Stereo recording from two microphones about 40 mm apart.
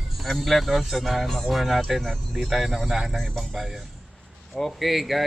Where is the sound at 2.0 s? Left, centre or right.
Centre.